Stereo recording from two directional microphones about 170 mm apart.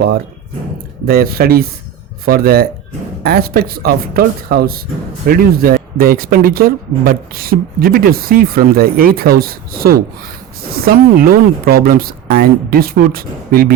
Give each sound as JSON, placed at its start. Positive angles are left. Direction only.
{"t": 1.0, "sound": "speech", "side_deg": -60}